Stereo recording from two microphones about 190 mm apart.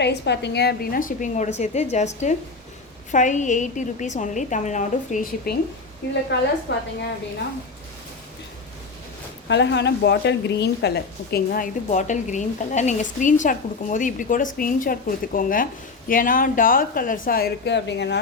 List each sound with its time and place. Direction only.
0.0 s a woman's voice: 65° left (ahead or behind); by 5.5 s 45° left (ahead or behind)
6.0 s a woman's voice: 65° left (ahead or behind)
9.5 s a woman's voice: 65° left (ahead or behind)